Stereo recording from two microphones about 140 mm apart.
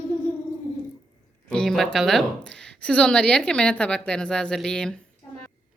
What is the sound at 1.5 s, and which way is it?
A woman's voice, 5° left (ahead or behind).